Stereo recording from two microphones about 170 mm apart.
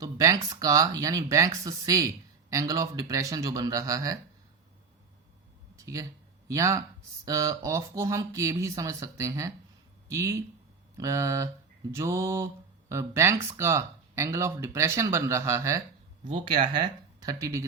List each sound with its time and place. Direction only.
0.0 s speech: 20° right (ahead or behind)
5.7 s a sound: 20° right (ahead or behind)
6.5 s speech: 20° right (ahead or behind)
16.2 s speech: 30° right (ahead or behind)